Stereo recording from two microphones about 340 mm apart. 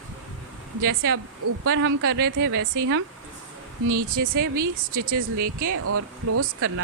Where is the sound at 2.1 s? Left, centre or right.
Right.